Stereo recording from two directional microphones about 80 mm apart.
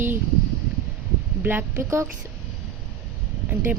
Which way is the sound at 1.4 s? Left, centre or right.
Right.